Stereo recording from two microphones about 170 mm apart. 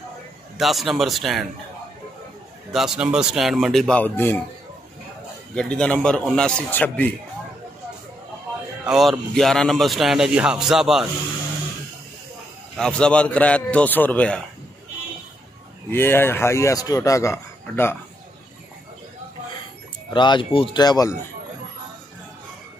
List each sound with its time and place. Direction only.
0.6 s a man's voice: centre (ahead or behind)
2.7 s a man's voice: 5° right (ahead or behind)
5.5 s a man's voice: 5° left (ahead or behind)
8.8 s a man's voice: centre (ahead or behind)
12.7 s speech: 5° left (ahead or behind)
15.9 s speech: 15° left (ahead or behind)
20.1 s speech: 25° left (ahead or behind)